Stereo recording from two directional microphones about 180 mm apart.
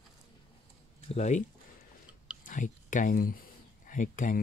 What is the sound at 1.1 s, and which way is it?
Speech, 40° left (ahead or behind).